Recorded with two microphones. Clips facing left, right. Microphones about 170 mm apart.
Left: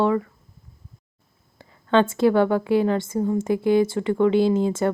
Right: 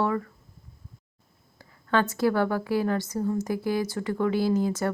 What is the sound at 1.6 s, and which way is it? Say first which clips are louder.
A woman's voice: left 6 dB; 25° left (ahead or behind).